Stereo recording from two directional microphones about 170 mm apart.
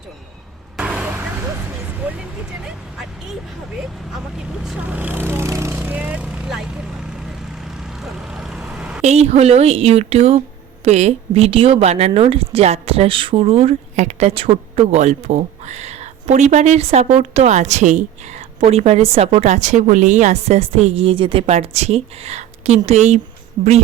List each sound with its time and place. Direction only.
0.8 s vehicle: 5° right (ahead or behind)
4.6 s speech: 5° right (ahead or behind)
7.3 s vehicle: centre (ahead or behind)
9.0 s a woman's voice: 40° right (ahead or behind)